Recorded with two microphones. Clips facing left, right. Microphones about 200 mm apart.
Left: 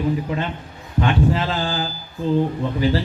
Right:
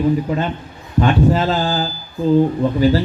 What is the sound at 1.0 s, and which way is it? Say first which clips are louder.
A man's voice: right 4 dB; 40° right (ahead or behind).